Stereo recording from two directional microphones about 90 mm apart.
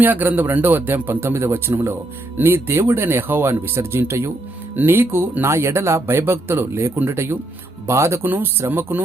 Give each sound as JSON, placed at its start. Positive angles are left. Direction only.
{"t": 0.0, "sound": "speech", "side_deg": -20}